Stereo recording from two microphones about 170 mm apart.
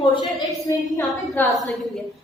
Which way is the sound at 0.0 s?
25° left (ahead or behind).